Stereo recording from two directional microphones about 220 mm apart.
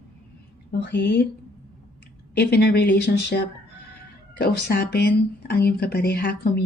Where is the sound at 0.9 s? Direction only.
50° left (ahead or behind).